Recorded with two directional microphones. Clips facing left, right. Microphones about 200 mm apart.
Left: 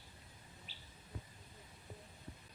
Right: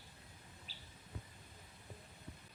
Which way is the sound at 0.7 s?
40° right (ahead or behind).